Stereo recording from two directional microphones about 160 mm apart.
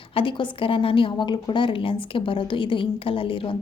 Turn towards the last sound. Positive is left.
turn(degrees=35)  # may be behind; listen again after turning